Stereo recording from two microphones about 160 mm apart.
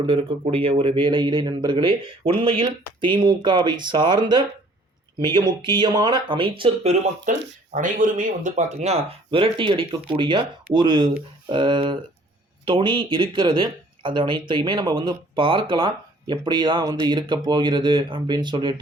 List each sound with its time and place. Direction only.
0.0 s speech: 35° right (ahead or behind)